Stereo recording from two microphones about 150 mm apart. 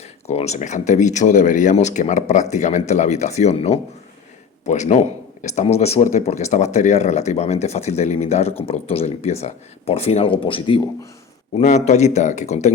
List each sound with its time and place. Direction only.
0.3 s speech: 45° left (ahead or behind)
11.5 s speech: 50° left (ahead or behind)